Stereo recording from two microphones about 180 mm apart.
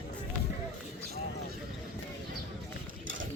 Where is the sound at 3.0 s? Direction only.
90° right.